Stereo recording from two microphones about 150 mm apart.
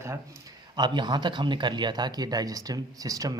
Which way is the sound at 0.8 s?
30° right (ahead or behind).